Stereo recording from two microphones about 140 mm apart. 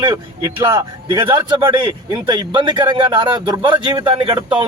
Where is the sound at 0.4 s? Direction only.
20° right (ahead or behind).